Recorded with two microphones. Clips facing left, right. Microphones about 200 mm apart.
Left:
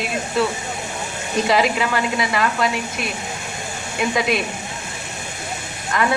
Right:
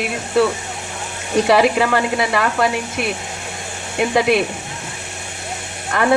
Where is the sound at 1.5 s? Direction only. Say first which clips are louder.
Right 5 dB; 60° right (ahead or behind).